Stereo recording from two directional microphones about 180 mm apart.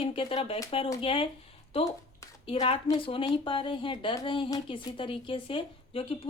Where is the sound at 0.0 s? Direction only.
30° left (ahead or behind).